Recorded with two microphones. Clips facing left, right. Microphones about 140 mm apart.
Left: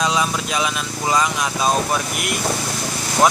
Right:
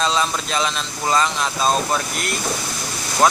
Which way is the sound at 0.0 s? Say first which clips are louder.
Even; 10° left (ahead or behind).